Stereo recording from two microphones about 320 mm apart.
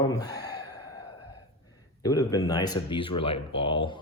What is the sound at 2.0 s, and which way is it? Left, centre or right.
Speech, centre.